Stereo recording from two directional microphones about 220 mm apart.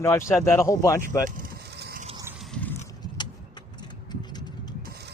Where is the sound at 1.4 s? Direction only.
45° right (ahead or behind).